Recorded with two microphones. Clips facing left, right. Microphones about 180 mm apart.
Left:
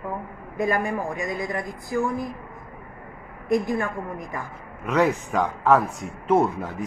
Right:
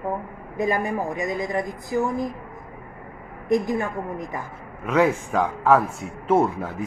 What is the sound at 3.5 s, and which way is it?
Speech, 20° right (ahead or behind).